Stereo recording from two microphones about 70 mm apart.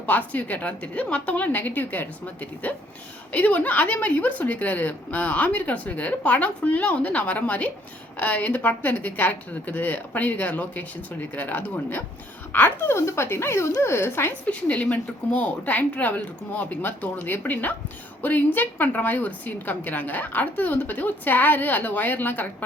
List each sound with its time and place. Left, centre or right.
0.0 s a woman's voice: left
14.4 s a woman's voice: centre